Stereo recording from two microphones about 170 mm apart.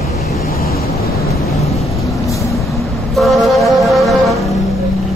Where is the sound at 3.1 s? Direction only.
Centre (ahead or behind).